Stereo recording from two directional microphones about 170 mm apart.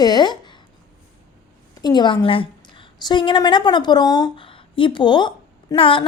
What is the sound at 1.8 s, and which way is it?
A woman's voice, 25° left (ahead or behind).